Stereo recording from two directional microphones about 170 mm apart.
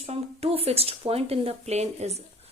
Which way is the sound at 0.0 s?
35° right (ahead or behind).